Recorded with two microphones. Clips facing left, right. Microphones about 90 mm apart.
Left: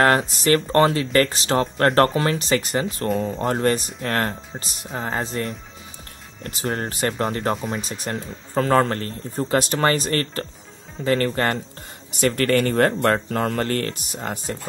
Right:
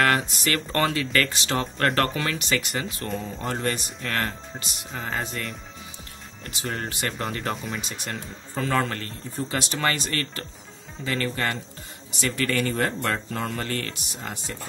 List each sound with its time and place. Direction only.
0.0 s speech: 35° left (ahead or behind)
3.1 s speech: 50° left (ahead or behind); by 5.5 s 35° left (ahead or behind)
6.4 s speech: 45° left (ahead or behind)